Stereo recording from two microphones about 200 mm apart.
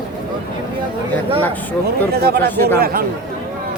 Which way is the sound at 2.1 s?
50° right (ahead or behind).